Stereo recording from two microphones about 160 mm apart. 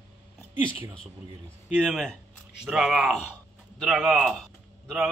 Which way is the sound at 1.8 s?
Centre (ahead or behind).